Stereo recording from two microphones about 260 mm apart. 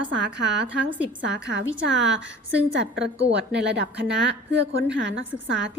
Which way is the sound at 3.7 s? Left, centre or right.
Right.